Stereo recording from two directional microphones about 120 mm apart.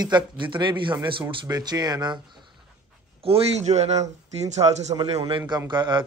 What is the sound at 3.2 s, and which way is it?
Speech, 55° right (ahead or behind).